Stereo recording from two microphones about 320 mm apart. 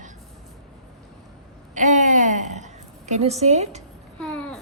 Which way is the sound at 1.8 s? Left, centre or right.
Right.